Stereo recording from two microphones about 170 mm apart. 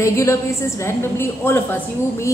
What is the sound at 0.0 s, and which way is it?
A woman's voice, 15° left (ahead or behind).